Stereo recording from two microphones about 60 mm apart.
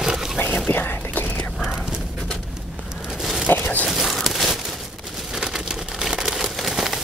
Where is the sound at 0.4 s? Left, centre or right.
Left.